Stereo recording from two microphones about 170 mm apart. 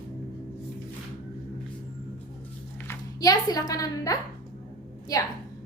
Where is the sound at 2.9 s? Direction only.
20° left (ahead or behind).